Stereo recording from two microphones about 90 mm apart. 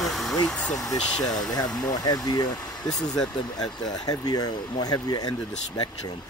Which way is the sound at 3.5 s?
45° left (ahead or behind).